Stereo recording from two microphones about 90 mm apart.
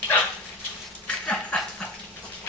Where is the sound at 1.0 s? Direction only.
15° left (ahead or behind).